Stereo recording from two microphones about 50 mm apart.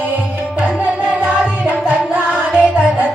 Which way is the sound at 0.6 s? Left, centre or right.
Right.